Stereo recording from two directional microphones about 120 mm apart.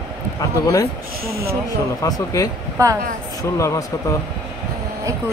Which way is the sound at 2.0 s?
30° left (ahead or behind).